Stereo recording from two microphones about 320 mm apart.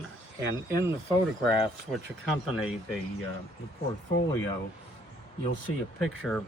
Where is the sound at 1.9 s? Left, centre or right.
Centre.